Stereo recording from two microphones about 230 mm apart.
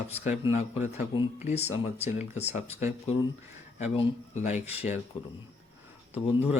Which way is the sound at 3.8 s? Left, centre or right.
Left.